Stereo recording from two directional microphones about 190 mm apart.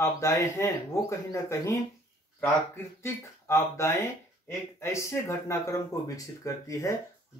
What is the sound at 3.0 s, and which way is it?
Speech, 15° left (ahead or behind).